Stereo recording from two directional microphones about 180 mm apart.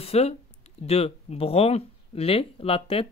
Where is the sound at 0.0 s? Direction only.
35° left (ahead or behind).